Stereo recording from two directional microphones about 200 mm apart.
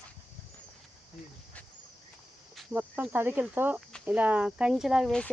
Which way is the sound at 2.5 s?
5° right (ahead or behind).